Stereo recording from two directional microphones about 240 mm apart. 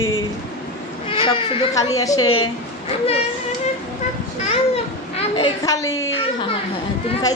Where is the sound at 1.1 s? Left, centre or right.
Left.